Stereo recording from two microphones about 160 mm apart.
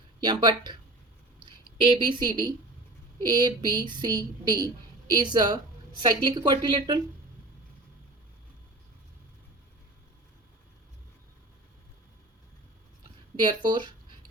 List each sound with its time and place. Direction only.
0.2 s a woman's voice: 25° right (ahead or behind)
1.8 s a woman's voice: 30° right (ahead or behind)
13.4 s a woman's voice: 25° right (ahead or behind)